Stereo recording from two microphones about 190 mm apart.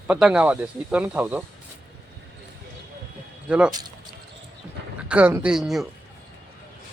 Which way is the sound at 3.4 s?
5° right (ahead or behind).